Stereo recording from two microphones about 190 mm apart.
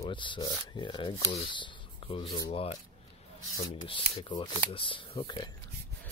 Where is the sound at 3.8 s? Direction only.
25° left (ahead or behind).